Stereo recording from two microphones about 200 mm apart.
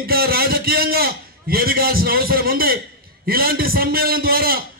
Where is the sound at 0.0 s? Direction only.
50° right (ahead or behind).